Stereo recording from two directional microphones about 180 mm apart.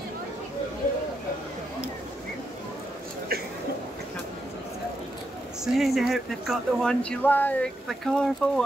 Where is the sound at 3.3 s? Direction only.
60° right (ahead or behind).